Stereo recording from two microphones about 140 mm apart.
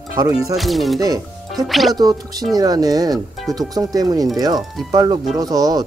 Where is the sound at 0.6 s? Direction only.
Centre (ahead or behind).